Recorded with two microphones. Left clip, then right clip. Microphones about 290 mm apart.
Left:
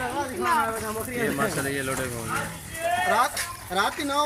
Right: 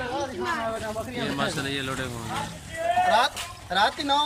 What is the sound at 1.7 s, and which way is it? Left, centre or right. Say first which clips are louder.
Speech: left 1 dB; centre.